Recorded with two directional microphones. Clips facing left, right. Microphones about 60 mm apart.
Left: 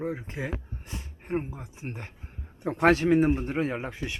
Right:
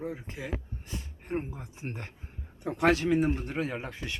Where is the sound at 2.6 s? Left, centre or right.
Left.